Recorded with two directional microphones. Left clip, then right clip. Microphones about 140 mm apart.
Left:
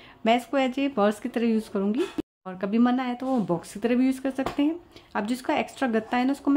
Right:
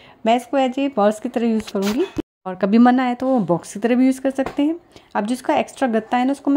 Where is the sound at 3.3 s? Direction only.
45° right (ahead or behind).